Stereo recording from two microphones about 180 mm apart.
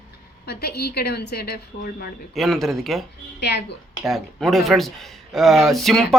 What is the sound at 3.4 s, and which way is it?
Speech, 65° left (ahead or behind).